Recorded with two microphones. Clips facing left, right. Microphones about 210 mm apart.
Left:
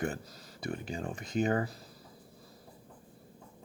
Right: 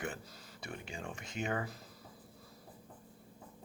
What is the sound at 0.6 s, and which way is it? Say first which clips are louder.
Speech: left 8 dB; 40° left (ahead or behind).